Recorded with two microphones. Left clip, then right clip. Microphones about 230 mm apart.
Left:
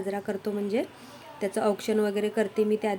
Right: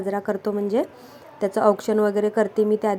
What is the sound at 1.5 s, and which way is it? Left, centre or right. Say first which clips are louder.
Speech: right 7 dB; centre.